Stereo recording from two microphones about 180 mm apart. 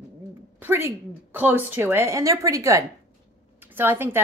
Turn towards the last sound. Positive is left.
turn(degrees=-10)  # may be behind; listen again after turning